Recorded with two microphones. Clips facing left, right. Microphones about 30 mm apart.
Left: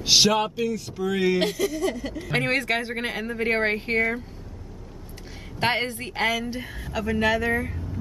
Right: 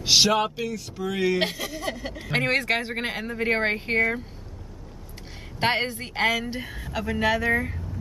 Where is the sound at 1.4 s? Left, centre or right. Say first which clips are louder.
Left 4 dB; centre.